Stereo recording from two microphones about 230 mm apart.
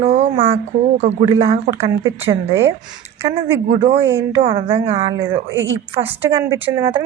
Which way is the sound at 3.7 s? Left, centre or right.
Right.